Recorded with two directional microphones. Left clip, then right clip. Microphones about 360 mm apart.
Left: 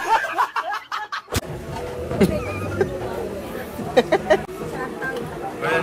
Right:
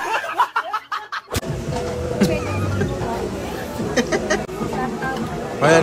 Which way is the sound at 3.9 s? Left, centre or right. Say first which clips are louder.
Left 4 dB; centre.